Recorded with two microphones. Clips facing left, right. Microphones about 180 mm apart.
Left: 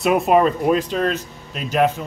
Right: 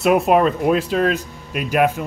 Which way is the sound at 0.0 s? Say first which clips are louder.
Right 1 dB; centre (ahead or behind).